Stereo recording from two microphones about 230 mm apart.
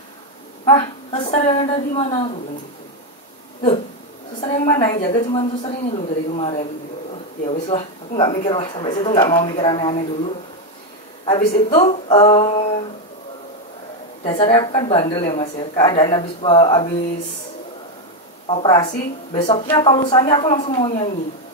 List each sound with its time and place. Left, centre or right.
0.7 s speech: left
4.4 s a woman's voice: left
14.2 s speech: left
18.5 s speech: left